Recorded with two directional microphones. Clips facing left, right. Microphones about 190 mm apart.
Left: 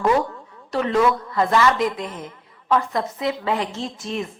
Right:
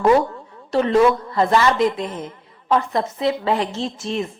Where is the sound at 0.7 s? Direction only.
30° right (ahead or behind).